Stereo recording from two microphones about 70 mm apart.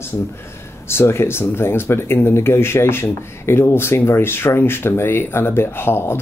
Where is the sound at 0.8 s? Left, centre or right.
Left.